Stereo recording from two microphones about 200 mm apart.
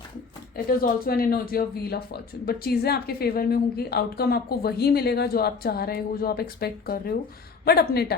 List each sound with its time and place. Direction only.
0.5 s a woman's voice: 50° left (ahead or behind)